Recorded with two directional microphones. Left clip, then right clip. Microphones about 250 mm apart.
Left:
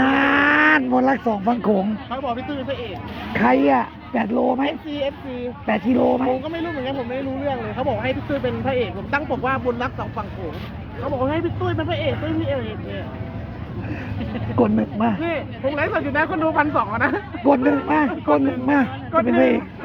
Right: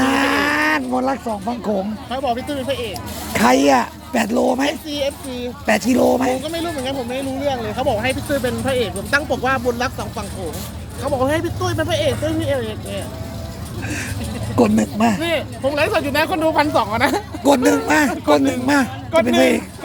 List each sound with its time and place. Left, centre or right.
0.0 s livestock: centre
2.0 s speech: right
3.3 s speech: centre
4.9 s speech: right
5.6 s speech: centre
6.4 s speech: right
14.5 s speech: centre
15.2 s speech: right
17.4 s speech: centre